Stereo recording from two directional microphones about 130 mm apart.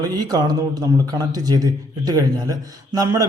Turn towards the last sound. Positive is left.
turn(degrees=-25)  # may be behind; listen again after turning